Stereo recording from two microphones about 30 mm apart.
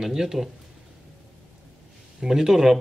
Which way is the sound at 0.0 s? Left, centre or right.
Centre.